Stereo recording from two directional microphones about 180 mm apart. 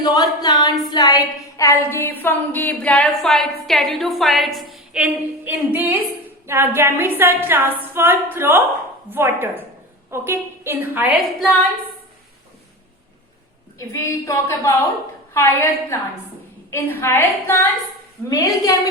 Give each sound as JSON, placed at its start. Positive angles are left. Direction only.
{"t": 0.0, "sound": "a woman's voice", "side_deg": 20}
{"t": 13.7, "sound": "a woman's voice", "side_deg": 15}